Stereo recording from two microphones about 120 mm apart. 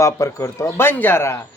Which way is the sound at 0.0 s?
25° left (ahead or behind).